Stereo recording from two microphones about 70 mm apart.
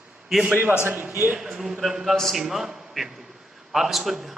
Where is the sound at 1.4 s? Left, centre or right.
Centre.